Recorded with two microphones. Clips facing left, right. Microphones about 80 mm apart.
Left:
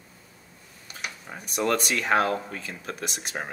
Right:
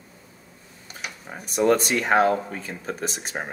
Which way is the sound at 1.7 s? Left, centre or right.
Right.